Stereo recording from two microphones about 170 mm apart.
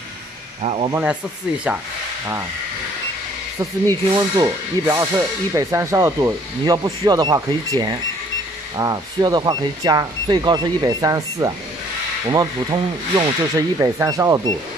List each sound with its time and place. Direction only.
0.6 s speech: 35° right (ahead or behind)
4.1 s speech: 25° right (ahead or behind)